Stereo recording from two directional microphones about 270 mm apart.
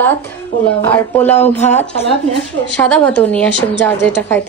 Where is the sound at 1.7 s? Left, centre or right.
Left.